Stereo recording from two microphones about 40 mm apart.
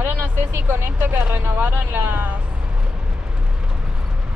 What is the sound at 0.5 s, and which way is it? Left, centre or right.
Speech, right.